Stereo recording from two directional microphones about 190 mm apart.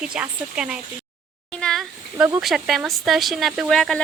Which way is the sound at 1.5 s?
5° left (ahead or behind).